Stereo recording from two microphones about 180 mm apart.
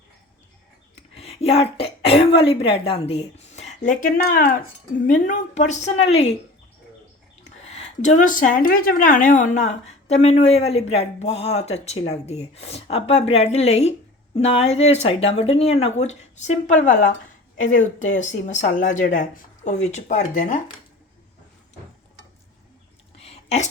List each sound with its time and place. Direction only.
1.1 s speech: 35° left (ahead or behind)
7.4 s speech: 40° left (ahead or behind)
23.1 s a sound: 35° left (ahead or behind)